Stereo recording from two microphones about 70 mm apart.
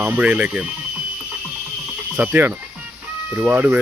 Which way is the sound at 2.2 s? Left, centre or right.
Right.